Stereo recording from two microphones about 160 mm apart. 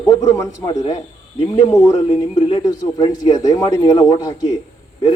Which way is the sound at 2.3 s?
25° left (ahead or behind).